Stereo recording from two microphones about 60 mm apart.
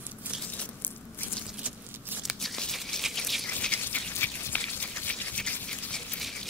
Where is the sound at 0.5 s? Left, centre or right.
Left.